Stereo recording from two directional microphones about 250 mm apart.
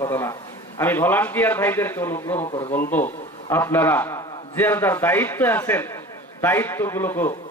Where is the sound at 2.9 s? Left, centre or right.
Centre.